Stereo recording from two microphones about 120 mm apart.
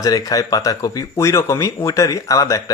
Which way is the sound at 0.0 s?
30° left (ahead or behind).